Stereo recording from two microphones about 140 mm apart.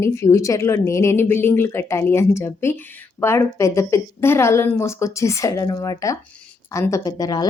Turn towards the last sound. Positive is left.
turn(degrees=30)  # may be behind; listen again after turning